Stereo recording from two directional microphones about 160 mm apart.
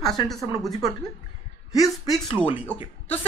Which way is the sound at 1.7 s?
20° left (ahead or behind).